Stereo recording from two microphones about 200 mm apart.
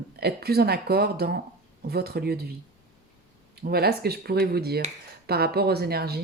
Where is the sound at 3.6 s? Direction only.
50° right (ahead or behind).